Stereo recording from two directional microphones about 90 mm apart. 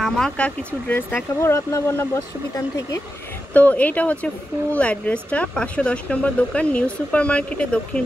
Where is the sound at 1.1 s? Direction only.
25° left (ahead or behind).